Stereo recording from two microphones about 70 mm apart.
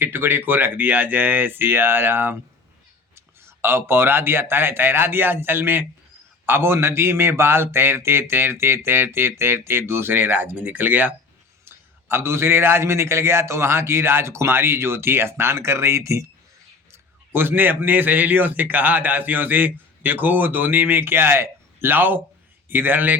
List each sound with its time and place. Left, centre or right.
0.0 s a man's voice: right
16.9 s speech: right